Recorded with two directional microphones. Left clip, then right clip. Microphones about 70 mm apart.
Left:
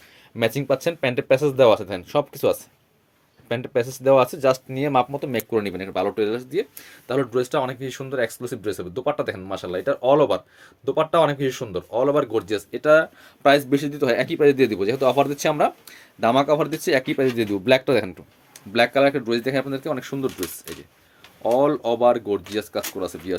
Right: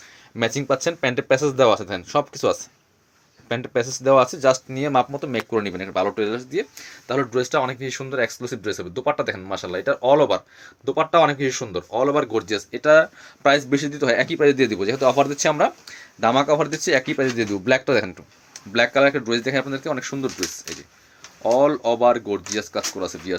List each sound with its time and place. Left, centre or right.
0.3 s speech: left
3.5 s speech: left
11.9 s speech: left
18.7 s speech: left